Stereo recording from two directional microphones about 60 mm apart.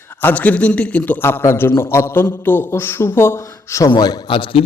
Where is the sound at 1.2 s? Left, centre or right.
Left.